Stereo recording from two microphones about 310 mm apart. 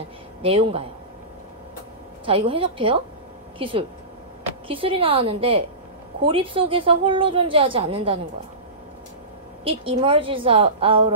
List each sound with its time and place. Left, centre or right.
0.4 s a woman's voice: centre
2.2 s a woman's voice: centre
9.7 s a woman's voice: centre